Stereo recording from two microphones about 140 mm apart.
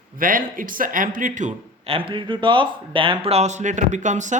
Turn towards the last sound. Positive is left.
turn(degrees=-60)  # may be behind; listen again after turning